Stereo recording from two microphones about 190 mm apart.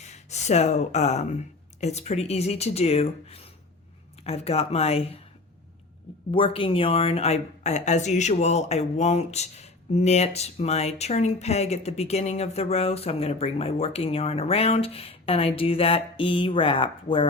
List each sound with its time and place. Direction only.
0.0 s a woman's voice: 35° left (ahead or behind)
6.3 s a woman's voice: 25° left (ahead or behind)